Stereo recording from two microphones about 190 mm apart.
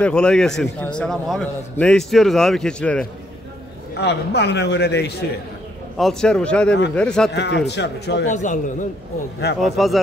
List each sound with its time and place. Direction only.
0.0 s a man's voice: 5° left (ahead or behind)
4.0 s a man's voice: 60° left (ahead or behind)
5.9 s a man's voice: centre (ahead or behind)
7.3 s a man's voice: 65° left (ahead or behind)
8.3 s a man's voice: 40° left (ahead or behind)
9.6 s a man's voice: centre (ahead or behind)